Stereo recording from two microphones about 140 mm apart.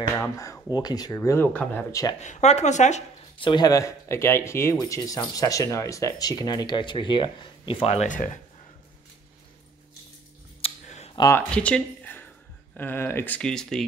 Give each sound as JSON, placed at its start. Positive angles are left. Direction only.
{"t": 0.2, "sound": "speech", "side_deg": 25}
{"t": 2.1, "sound": "a woman's voice", "side_deg": 55}
{"t": 3.3, "sound": "speech", "side_deg": 35}
{"t": 10.6, "sound": "a sound", "side_deg": 50}
{"t": 11.3, "sound": "speech", "side_deg": 10}